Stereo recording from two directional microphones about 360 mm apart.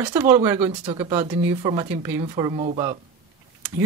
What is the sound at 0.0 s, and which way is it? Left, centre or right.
Speech, centre.